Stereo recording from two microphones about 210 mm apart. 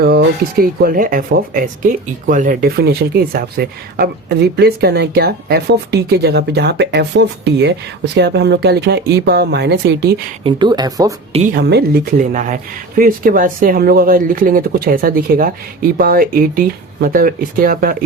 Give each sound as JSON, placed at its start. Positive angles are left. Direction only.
{"t": 0.0, "sound": "speech", "side_deg": -45}
{"t": 10.4, "sound": "speech", "side_deg": -20}
{"t": 11.3, "sound": "speech", "side_deg": -30}
{"t": 11.5, "sound": "speech", "side_deg": -50}
{"t": 12.3, "sound": "a man's voice", "side_deg": -40}